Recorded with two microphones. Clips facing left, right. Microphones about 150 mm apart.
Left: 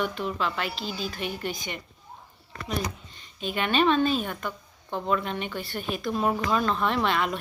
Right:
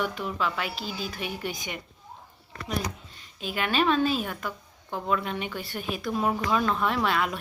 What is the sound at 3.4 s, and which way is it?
Speech, 5° right (ahead or behind).